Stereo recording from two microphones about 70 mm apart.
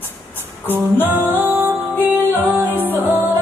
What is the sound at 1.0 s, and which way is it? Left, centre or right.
Music, right.